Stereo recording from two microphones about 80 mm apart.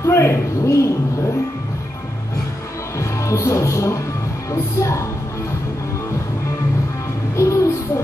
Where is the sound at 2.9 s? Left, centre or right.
Left.